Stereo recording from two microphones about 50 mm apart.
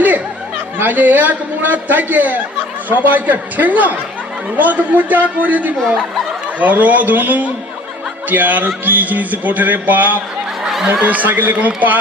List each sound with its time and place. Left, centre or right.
0.7 s a man's voice: right